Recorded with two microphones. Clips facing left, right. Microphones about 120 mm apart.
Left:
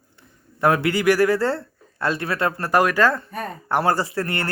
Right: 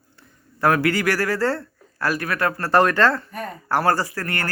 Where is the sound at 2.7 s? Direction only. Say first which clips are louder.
Right 1 dB; 10° left (ahead or behind).